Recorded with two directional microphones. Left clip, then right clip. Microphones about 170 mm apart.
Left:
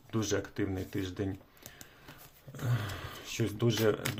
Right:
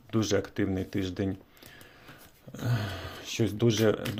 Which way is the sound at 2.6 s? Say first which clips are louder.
Right 4 dB; 25° right (ahead or behind).